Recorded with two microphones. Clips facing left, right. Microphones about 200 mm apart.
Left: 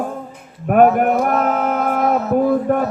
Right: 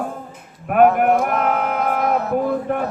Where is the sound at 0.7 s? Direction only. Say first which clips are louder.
Left 1 dB; 40° left (ahead or behind).